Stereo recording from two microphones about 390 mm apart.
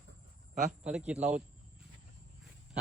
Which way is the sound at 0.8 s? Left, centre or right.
Centre.